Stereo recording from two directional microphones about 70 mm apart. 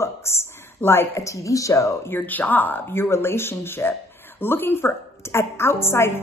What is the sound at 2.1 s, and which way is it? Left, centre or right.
A woman's voice, left.